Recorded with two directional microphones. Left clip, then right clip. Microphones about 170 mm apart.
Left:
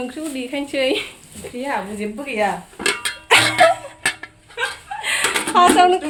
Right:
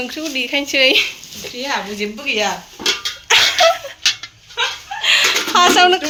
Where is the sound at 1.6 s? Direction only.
55° left (ahead or behind).